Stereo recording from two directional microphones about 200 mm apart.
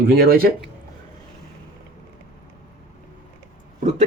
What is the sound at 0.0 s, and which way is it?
Speech, 50° right (ahead or behind).